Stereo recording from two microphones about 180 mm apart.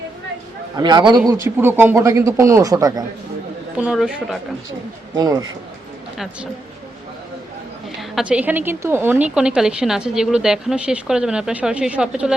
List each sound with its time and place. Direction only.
0.8 s a man's voice: 25° right (ahead or behind)
1.3 s speech: 15° right (ahead or behind)
3.8 s a woman's voice: 5° right (ahead or behind)
5.1 s a man's voice: 20° right (ahead or behind)
8.1 s a woman's voice: 5° right (ahead or behind)